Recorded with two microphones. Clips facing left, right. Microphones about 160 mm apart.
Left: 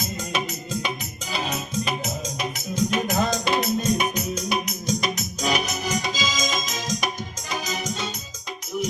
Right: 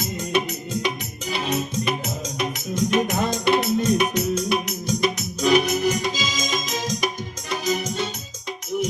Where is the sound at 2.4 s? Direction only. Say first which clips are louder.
Right 2 dB; 70° right (ahead or behind).